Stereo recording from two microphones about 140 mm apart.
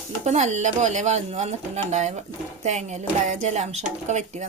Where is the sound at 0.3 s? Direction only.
55° right (ahead or behind).